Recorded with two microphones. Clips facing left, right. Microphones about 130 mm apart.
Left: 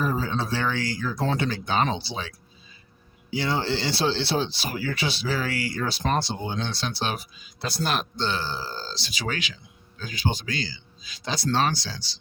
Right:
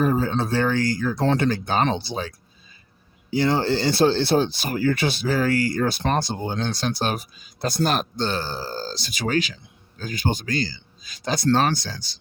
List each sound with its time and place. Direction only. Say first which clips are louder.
0.0 s speech: right 5 dB; 50° right (ahead or behind)
1.1 s speech: right 4 dB; 65° right (ahead or behind)
1.4 s speech: right 3 dB; 45° right (ahead or behind)